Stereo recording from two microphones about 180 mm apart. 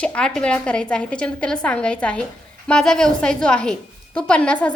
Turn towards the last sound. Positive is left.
turn(degrees=5)  # may be behind; listen again after turning